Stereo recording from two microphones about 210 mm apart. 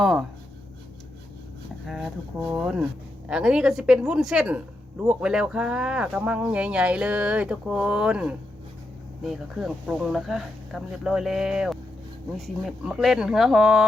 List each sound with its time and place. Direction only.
0.0 s speech: centre (ahead or behind)
1.9 s speech: centre (ahead or behind)